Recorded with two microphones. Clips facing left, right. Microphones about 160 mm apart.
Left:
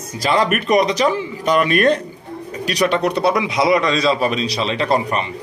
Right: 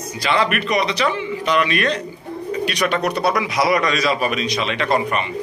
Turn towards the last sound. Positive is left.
turn(degrees=35)  # may be behind; listen again after turning